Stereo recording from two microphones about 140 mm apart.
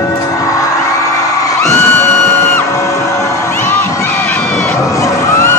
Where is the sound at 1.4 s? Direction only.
20° left (ahead or behind).